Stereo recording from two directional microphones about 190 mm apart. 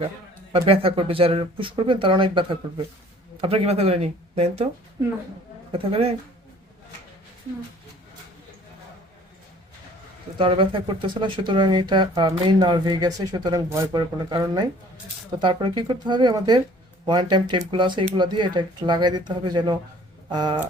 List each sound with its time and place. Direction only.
0.5 s speech: 30° right (ahead or behind)
5.7 s speech: 30° right (ahead or behind)
10.3 s speech: 25° right (ahead or behind)